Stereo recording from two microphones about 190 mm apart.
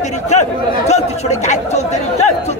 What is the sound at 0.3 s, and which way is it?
Speech, 35° left (ahead or behind).